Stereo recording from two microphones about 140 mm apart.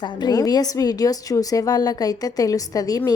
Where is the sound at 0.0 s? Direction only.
30° left (ahead or behind).